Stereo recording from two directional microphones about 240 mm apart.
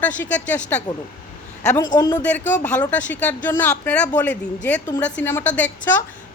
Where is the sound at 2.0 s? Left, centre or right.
Centre.